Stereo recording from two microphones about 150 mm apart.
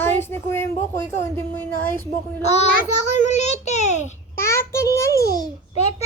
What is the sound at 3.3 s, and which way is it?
Speech, 50° left (ahead or behind).